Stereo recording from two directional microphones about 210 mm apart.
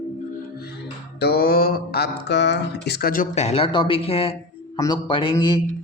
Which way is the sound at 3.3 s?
30° left (ahead or behind).